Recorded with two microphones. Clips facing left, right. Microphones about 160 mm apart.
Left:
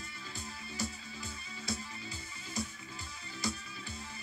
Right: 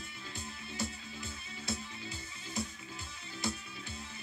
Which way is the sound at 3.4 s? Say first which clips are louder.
Even; 25° right (ahead or behind).